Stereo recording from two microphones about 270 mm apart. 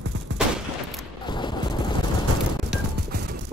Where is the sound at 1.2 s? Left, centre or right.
Centre.